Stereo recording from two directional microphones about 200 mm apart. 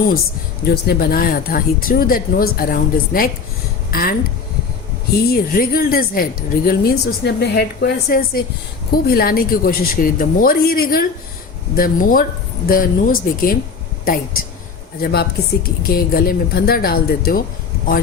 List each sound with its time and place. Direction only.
0.7 s speech: 50° left (ahead or behind)
5.3 s speech: 50° left (ahead or behind)